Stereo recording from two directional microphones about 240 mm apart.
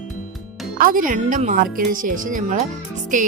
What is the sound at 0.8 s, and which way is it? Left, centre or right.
Speech, right.